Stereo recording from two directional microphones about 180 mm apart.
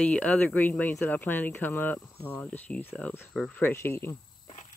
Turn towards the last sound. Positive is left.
turn(degrees=15)  # may be behind; listen again after turning